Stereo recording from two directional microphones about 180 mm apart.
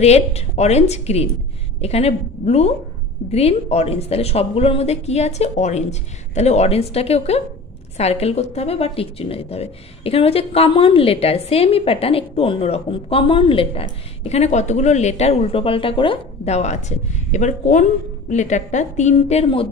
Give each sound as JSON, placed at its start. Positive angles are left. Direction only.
{"t": 0.0, "sound": "a woman's voice", "side_deg": 35}